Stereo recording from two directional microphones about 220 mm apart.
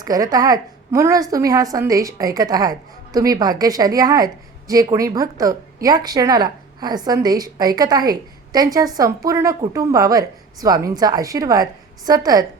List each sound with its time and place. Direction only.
0.0 s a woman's voice: 15° right (ahead or behind)